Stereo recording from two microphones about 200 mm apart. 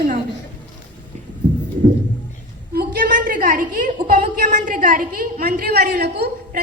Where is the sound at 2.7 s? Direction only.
50° right (ahead or behind).